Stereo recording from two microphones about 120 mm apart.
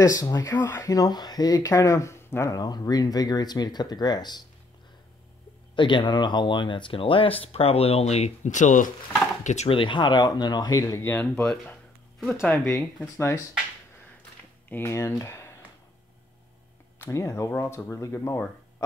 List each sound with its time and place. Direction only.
0.0 s speech: 30° left (ahead or behind)
5.8 s speech: 40° left (ahead or behind); by 9.7 s 85° left
9.7 s speech: 45° left (ahead or behind); by 11.1 s 30° left (ahead or behind)
11.1 s speech: 15° left (ahead or behind)
12.2 s speech: centre (ahead or behind)
14.7 s speech: 20° left (ahead or behind)
17.0 s speech: 25° left (ahead or behind)